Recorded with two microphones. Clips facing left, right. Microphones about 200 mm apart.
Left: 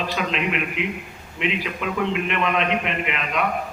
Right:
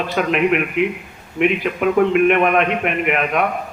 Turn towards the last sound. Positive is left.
turn(degrees=-55)  # may be behind; listen again after turning